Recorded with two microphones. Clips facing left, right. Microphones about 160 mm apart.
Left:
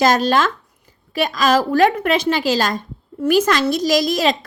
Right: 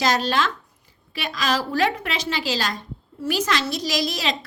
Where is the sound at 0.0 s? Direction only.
45° left (ahead or behind).